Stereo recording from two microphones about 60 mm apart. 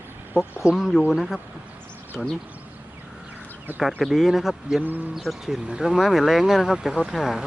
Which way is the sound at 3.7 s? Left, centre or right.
Right.